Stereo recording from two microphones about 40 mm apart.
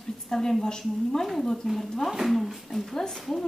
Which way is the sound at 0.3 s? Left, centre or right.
Centre.